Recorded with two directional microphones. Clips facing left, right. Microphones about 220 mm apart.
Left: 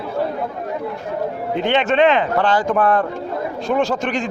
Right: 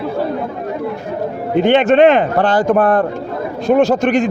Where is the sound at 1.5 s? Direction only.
50° right (ahead or behind).